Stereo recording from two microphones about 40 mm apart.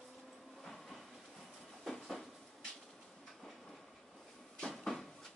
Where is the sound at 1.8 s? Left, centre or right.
Centre.